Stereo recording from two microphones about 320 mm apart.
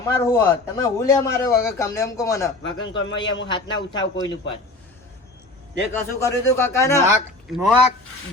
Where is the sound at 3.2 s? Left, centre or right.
Left.